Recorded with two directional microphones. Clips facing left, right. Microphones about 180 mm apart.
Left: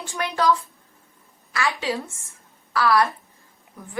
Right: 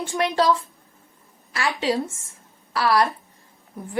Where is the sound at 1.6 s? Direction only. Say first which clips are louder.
Right 2 dB; 25° right (ahead or behind).